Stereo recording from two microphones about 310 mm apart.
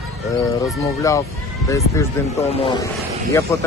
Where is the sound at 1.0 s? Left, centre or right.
Centre.